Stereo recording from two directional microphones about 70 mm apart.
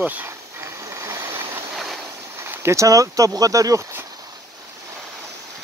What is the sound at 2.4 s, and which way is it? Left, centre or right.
Speech, right.